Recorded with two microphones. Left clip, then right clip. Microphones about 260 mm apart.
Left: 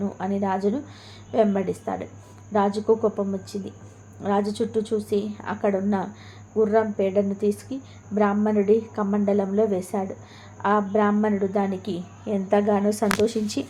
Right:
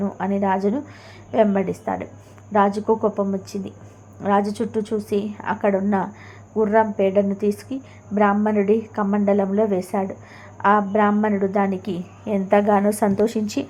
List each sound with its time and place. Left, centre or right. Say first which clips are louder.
0.0 s a woman's voice: right 4 dB; centre